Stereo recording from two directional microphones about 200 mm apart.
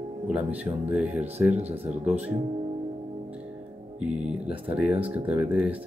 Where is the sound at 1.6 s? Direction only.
35° right (ahead or behind).